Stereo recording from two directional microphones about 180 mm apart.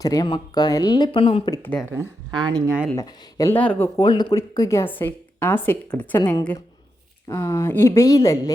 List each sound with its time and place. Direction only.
0.0 s speech: 20° left (ahead or behind)
1.6 s speech: 10° left (ahead or behind)
1.9 s speech: 20° right (ahead or behind)
2.9 s speech: 20° left (ahead or behind)